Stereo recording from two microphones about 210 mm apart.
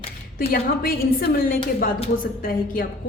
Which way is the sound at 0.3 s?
45° left (ahead or behind).